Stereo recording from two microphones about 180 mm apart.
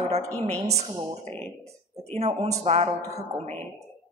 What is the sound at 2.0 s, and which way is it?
Speech, 35° right (ahead or behind).